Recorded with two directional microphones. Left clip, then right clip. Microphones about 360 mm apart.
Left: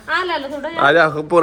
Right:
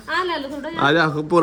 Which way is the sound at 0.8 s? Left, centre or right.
Centre.